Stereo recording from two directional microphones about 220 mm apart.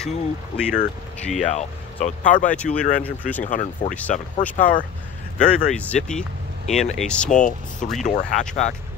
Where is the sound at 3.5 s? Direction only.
35° left (ahead or behind).